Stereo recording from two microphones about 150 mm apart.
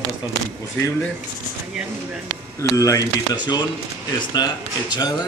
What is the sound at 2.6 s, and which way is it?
Speech, 20° left (ahead or behind).